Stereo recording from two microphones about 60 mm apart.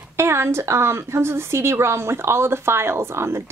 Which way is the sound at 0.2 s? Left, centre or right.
Right.